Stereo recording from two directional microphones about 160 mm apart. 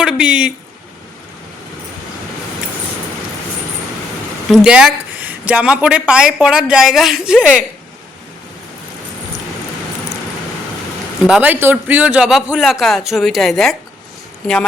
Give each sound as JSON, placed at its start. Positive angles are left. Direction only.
{"t": 0.0, "sound": "speech", "side_deg": -5}
{"t": 4.4, "sound": "a woman's voice", "side_deg": 0}
{"t": 11.3, "sound": "a woman's voice", "side_deg": -10}